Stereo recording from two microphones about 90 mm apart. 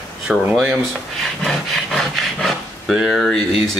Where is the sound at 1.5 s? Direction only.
5° left (ahead or behind).